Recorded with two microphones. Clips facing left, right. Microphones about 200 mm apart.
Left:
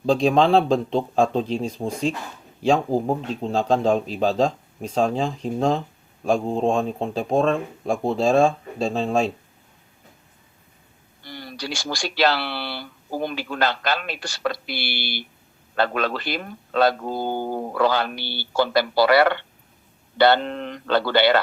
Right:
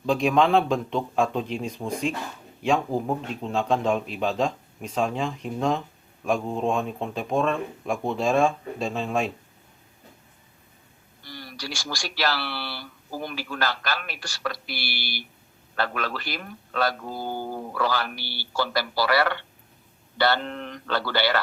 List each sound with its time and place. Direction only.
0.0 s speech: 30° left (ahead or behind)
11.2 s speech: 25° left (ahead or behind)
17.3 s speech: 55° left (ahead or behind)
17.7 s speech: 25° left (ahead or behind)